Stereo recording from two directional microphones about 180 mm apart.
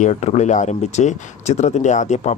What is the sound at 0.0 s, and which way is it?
Speech, 40° left (ahead or behind).